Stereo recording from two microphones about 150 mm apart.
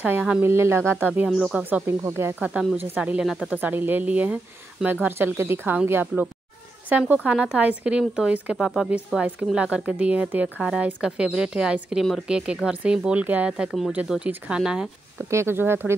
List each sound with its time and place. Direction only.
0.0 s speech: 10° right (ahead or behind)
15.2 s speech: 15° right (ahead or behind)